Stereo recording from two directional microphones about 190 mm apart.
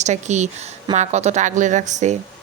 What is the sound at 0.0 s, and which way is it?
A woman's voice, 40° right (ahead or behind).